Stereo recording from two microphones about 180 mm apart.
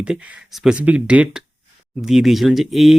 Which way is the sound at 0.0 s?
5° right (ahead or behind).